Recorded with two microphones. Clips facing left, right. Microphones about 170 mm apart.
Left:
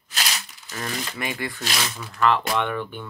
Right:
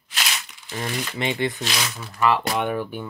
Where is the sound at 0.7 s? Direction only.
25° right (ahead or behind).